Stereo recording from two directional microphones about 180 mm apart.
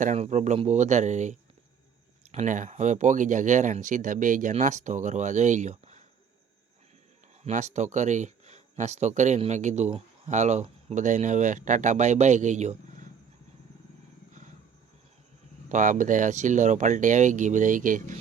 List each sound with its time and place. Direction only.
0.0 s speech: 40° right (ahead or behind)
7.4 s speech: 40° right (ahead or behind)
15.7 s speech: 45° right (ahead or behind)